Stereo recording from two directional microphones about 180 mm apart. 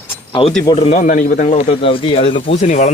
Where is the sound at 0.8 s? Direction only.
40° left (ahead or behind).